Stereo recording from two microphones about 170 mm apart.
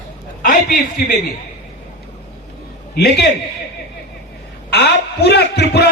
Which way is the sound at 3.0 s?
70° left (ahead or behind).